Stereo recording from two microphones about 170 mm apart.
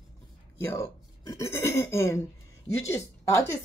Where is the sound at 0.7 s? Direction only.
15° left (ahead or behind).